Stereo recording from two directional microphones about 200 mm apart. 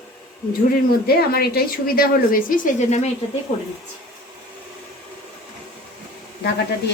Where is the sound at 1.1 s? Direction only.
50° left (ahead or behind).